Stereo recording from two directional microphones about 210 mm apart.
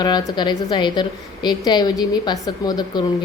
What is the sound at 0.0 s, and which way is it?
A woman's voice, 20° left (ahead or behind).